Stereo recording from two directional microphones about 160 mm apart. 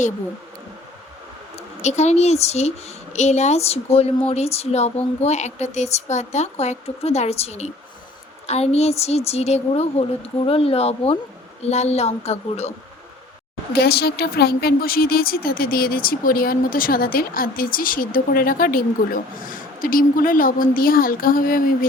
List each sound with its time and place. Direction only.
1.8 s a woman's voice: 45° left (ahead or behind)
13.7 s speech: 85° left; by 21.8 s 60° left (ahead or behind)